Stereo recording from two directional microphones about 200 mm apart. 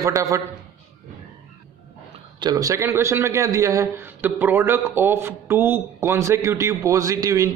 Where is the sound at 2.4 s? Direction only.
20° right (ahead or behind).